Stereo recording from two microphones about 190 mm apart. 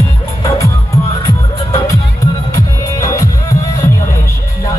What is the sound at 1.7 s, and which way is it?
Music, 15° left (ahead or behind).